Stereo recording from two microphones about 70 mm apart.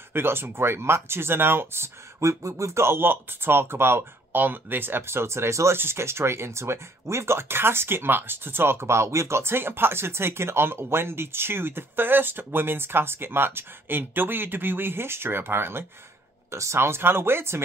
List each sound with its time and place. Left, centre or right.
0.1 s speech: right